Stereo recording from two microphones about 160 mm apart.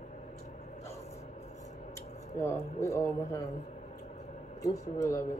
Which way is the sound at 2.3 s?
15° left (ahead or behind).